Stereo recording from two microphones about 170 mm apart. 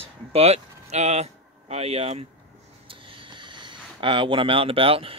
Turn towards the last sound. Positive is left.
turn(degrees=-35)  # may be behind; listen again after turning